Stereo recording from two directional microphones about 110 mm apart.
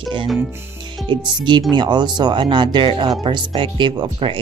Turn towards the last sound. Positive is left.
turn(degrees=-45)  # may be behind; listen again after turning